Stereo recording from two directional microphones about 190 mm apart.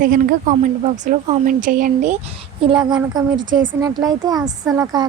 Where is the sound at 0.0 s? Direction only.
45° right (ahead or behind).